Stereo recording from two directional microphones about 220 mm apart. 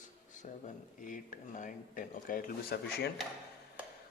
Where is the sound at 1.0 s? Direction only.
35° left (ahead or behind).